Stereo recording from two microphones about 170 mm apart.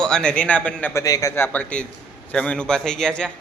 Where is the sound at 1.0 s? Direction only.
20° left (ahead or behind).